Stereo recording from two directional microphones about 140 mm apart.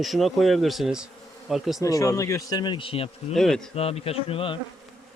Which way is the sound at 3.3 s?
5° left (ahead or behind).